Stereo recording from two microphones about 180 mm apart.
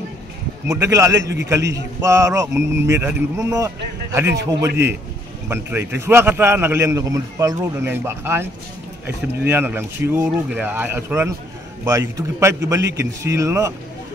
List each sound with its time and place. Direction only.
0.7 s a man's voice: 15° right (ahead or behind)